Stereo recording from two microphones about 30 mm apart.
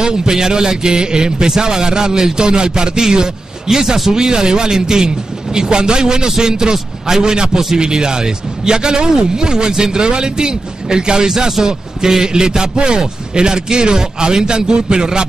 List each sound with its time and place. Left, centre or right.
0.0 s a man's voice: right